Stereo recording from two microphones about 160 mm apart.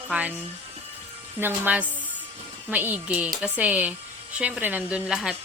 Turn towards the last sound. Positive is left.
turn(degrees=-5)  # may be behind; listen again after turning